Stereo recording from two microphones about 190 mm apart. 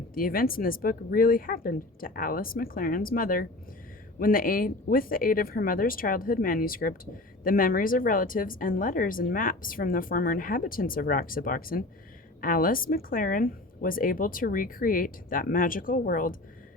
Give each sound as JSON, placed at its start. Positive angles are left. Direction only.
{"t": 0.1, "sound": "speech", "side_deg": 50}